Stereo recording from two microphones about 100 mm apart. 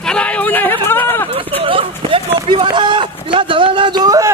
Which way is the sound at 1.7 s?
65° right (ahead or behind).